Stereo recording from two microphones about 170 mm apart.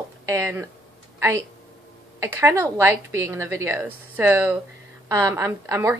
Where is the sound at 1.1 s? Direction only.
15° right (ahead or behind).